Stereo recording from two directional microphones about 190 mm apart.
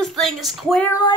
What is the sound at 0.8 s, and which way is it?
Child singing, 20° left (ahead or behind).